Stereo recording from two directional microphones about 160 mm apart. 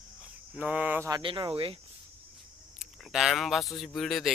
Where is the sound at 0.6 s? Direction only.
10° right (ahead or behind).